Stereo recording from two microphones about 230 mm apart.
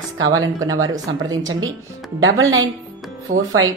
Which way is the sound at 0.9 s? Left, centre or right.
Centre.